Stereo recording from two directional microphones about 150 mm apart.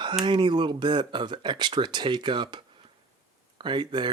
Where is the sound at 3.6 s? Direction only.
30° right (ahead or behind).